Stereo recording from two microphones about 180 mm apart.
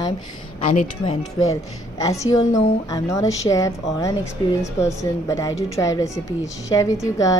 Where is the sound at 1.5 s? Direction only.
15° left (ahead or behind).